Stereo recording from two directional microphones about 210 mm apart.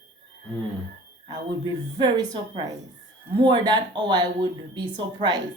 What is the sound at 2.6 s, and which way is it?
Speech, 25° right (ahead or behind).